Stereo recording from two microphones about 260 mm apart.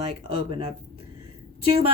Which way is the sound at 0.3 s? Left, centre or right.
Right.